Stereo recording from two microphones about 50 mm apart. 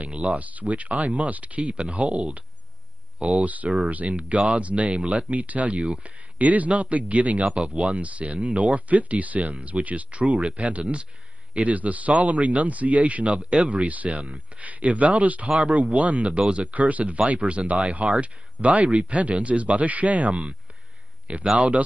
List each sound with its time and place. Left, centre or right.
0.0 s speech: right